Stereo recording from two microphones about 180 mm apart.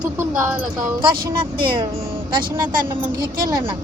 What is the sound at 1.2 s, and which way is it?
Speech, 55° right (ahead or behind).